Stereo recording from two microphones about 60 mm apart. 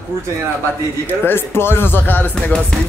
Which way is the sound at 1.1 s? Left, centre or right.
Left.